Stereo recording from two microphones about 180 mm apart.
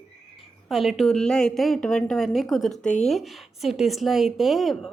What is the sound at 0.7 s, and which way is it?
A woman's voice, centre (ahead or behind).